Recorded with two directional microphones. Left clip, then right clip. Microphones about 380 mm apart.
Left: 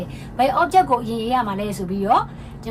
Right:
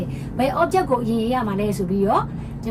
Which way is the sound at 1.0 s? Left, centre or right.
Left.